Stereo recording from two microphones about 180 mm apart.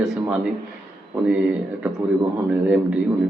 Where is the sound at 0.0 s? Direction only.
Centre (ahead or behind).